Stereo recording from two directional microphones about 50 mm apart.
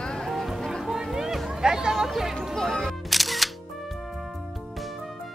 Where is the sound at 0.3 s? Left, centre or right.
Centre.